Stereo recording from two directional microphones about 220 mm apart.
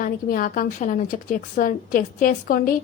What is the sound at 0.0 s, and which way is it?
A woman's voice, 40° left (ahead or behind).